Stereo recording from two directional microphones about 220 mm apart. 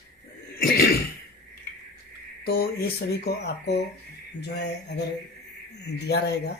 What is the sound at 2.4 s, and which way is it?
Speech, 45° left (ahead or behind).